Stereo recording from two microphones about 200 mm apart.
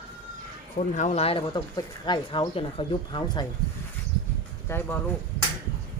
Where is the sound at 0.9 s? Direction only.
35° left (ahead or behind).